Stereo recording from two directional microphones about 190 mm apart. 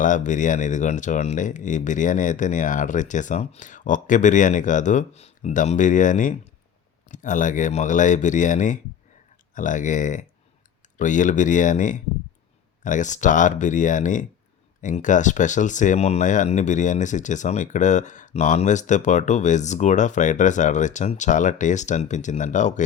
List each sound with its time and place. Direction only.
0.0 s speech: 40° left (ahead or behind)